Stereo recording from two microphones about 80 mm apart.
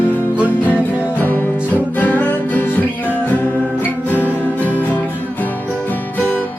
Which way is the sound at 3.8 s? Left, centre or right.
Left.